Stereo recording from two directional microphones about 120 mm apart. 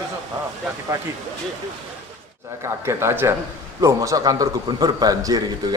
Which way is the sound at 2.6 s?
20° right (ahead or behind).